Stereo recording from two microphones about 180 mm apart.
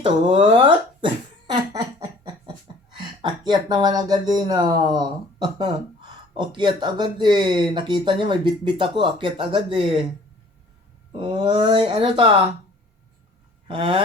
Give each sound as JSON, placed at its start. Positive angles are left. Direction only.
{"t": 0.0, "sound": "speech", "side_deg": -30}
{"t": 1.5, "sound": "laughter", "side_deg": -25}
{"t": 2.9, "sound": "speech", "side_deg": -25}
{"t": 11.2, "sound": "speech", "side_deg": -30}
{"t": 13.7, "sound": "speech", "side_deg": -25}